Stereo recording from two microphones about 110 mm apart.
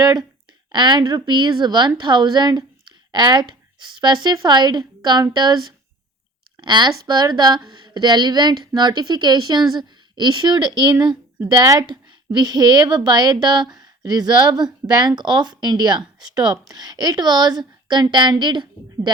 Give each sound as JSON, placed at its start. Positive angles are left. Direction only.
{"t": 0.0, "sound": "a woman's voice", "side_deg": -40}